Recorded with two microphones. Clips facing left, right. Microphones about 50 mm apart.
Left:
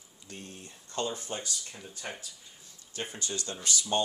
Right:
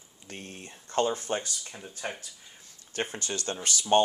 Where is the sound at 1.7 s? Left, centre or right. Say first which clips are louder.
Right 4 dB; right.